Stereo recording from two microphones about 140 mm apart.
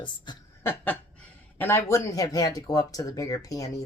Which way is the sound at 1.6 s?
15° left (ahead or behind).